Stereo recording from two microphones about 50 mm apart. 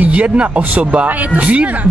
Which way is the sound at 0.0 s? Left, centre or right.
Right.